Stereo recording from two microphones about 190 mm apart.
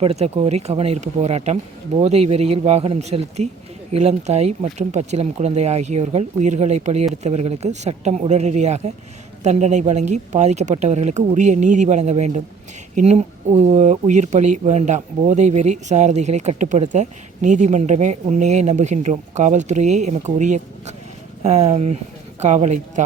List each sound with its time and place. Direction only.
0.0 s speech: 35° right (ahead or behind)